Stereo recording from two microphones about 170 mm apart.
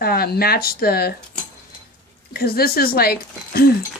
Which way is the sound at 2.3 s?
65° left (ahead or behind).